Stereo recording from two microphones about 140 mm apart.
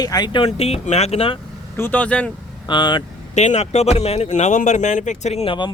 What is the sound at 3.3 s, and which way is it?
Speech, 55° left (ahead or behind).